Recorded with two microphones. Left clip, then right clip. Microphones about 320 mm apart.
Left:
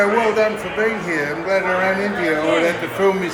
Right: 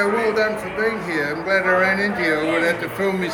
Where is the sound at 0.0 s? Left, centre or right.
Centre.